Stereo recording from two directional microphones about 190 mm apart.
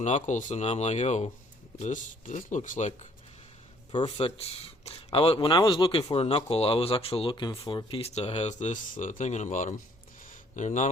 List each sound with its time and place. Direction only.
0.0 s speech: 40° left (ahead or behind)